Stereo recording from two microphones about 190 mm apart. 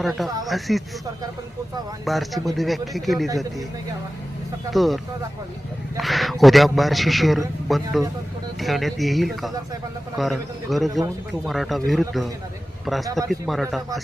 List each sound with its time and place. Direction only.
0.0 s a man's voice: centre (ahead or behind)
2.0 s a man's voice: centre (ahead or behind)
4.7 s a man's voice: centre (ahead or behind)
6.0 s a man's voice: centre (ahead or behind)
13.1 s speech: 15° right (ahead or behind)
13.5 s a man's voice: centre (ahead or behind)